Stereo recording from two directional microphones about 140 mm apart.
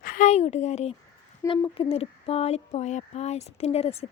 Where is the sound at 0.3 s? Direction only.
50° left (ahead or behind).